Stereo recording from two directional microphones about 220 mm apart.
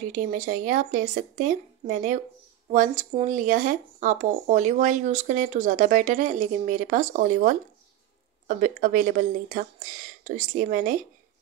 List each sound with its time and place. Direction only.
0.0 s speech: 35° right (ahead or behind)